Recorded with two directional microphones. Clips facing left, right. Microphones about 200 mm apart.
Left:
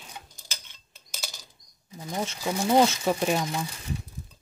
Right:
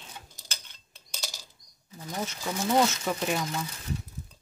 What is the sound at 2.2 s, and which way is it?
Speech, 30° left (ahead or behind).